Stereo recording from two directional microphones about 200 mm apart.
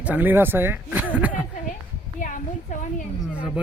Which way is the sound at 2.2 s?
40° left (ahead or behind).